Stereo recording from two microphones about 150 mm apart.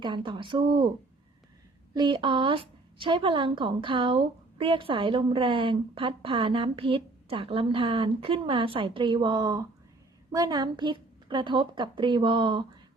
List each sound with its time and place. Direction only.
0.0 s a woman's voice: 35° right (ahead or behind)
1.9 s a woman's voice: 30° right (ahead or behind)